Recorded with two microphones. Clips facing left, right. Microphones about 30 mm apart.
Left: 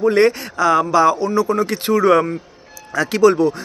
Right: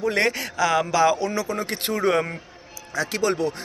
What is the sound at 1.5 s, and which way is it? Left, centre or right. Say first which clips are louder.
Speech: left 9 dB; left.